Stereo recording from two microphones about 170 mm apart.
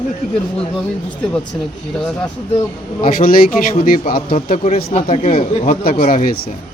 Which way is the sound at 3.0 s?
55° left (ahead or behind).